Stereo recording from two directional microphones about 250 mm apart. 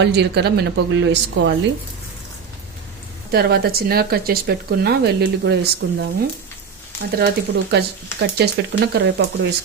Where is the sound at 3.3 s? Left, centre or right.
Right.